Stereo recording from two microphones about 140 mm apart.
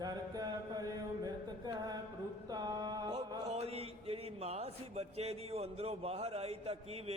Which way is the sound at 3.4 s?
50° right (ahead or behind).